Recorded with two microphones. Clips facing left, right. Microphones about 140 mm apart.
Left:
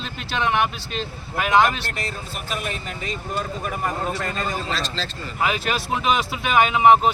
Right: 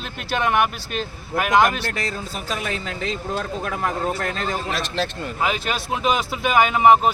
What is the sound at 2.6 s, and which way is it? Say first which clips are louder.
Speech: right 3 dB; 90° right.